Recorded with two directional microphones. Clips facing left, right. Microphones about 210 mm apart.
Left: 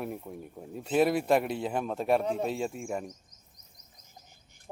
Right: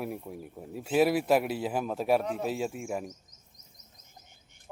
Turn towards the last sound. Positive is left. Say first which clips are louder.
# even
turn(degrees=-5)  # may be behind; listen again after turning